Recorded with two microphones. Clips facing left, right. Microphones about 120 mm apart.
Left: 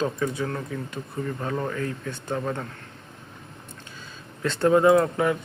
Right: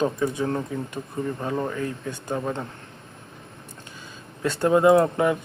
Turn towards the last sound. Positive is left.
turn(degrees=-20)  # may be behind; listen again after turning